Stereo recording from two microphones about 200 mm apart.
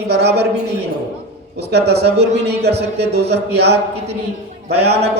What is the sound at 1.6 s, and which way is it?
Speech, 55° right (ahead or behind).